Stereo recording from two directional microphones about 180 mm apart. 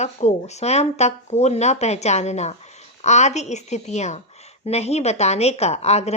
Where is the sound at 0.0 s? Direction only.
40° left (ahead or behind).